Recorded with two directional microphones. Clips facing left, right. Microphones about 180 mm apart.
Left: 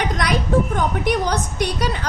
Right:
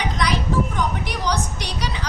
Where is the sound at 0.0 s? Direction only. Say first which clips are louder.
Left 2 dB; 55° left (ahead or behind).